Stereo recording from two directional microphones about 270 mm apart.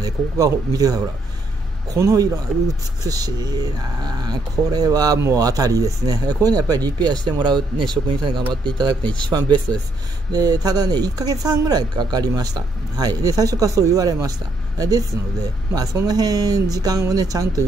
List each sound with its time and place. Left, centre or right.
0.0 s speech: centre